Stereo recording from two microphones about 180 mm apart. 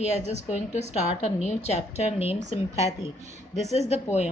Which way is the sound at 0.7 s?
35° left (ahead or behind).